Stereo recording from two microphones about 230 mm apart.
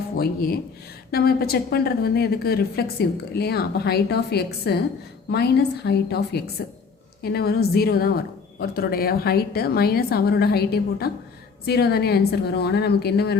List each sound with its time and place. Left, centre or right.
0.2 s a woman's voice: left